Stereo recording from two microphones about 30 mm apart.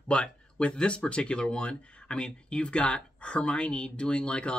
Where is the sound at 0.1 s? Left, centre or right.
Left.